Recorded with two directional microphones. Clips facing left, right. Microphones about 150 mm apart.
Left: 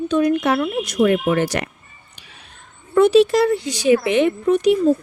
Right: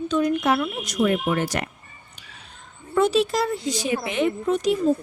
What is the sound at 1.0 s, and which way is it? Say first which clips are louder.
Speech: left 5 dB; 75° left (ahead or behind).